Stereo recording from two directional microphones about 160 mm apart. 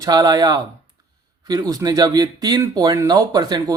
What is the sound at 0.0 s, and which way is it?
Speech, 25° right (ahead or behind).